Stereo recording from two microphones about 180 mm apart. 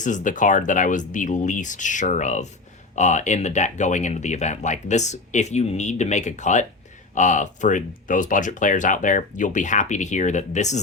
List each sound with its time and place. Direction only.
0.0 s speech: 45° left (ahead or behind)